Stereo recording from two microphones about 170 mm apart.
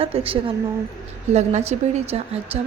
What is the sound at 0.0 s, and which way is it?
A woman's voice, 35° right (ahead or behind).